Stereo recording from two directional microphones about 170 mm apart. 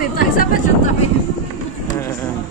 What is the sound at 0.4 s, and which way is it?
Speech, 55° left (ahead or behind).